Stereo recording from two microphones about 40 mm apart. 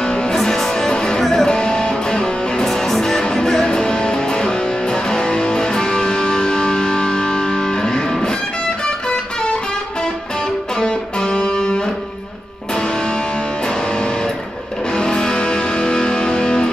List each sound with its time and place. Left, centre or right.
0.0 s music: left
1.5 s music: left
10.8 s music: left
15.0 s music: centre